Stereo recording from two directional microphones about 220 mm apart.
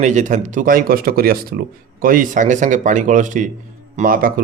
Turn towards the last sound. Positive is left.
turn(degrees=-40)  # may be behind; listen again after turning